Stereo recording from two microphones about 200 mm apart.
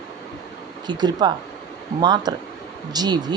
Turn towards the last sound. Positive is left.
turn(degrees=-20)  # may be behind; listen again after turning